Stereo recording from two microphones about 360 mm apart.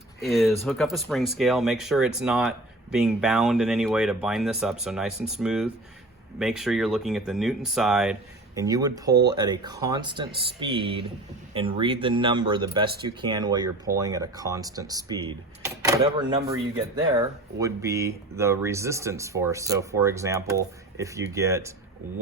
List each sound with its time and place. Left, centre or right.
0.2 s speech: centre